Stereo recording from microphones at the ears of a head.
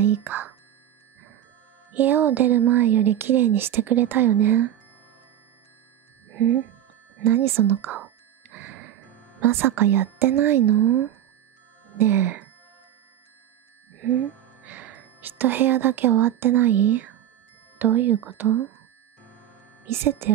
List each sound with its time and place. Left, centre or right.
0.0 s speech: right
1.9 s speech: right
6.2 s music: right
7.2 s speech: right
13.9 s a woman's voice: right
19.8 s speech: right